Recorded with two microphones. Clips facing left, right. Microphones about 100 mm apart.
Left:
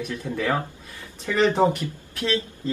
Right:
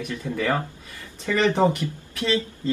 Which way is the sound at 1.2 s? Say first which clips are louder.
Even; 15° left (ahead or behind).